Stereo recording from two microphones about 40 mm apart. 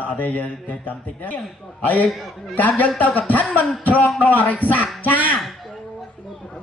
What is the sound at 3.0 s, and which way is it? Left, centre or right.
A man's voice, left.